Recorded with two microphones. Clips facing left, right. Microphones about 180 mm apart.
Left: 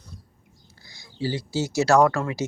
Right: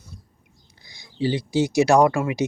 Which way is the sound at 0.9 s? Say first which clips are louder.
Right 4 dB; 15° right (ahead or behind).